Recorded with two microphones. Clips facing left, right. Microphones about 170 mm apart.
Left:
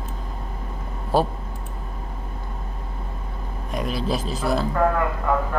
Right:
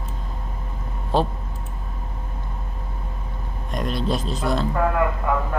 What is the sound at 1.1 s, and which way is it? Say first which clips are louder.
Speech: left 1 dB; 5° left (ahead or behind).